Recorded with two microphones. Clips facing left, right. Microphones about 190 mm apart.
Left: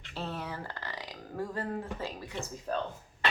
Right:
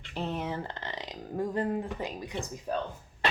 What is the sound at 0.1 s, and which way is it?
Speech, 20° right (ahead or behind).